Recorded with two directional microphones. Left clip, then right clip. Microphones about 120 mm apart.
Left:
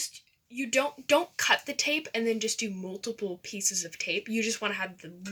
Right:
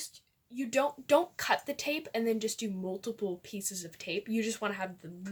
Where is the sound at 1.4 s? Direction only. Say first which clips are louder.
Left 5 dB; 45° right (ahead or behind).